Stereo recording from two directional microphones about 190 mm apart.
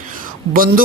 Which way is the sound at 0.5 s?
50° right (ahead or behind).